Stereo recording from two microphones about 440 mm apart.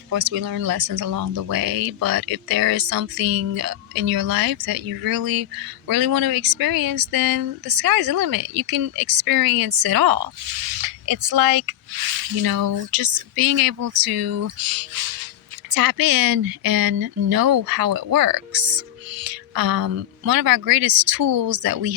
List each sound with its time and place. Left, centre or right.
0.1 s speech: right